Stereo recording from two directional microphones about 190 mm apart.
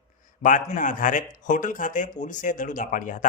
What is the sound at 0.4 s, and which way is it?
Speech, 45° left (ahead or behind).